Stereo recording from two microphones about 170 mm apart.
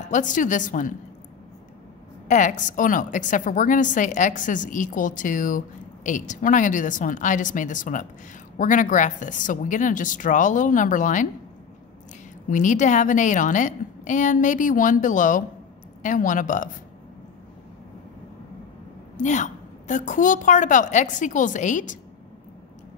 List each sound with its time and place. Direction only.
0.1 s a woman's voice: 50° left (ahead or behind)
2.2 s a woman's voice: 45° left (ahead or behind)
12.4 s a woman's voice: 45° left (ahead or behind)
19.1 s a woman's voice: 45° left (ahead or behind)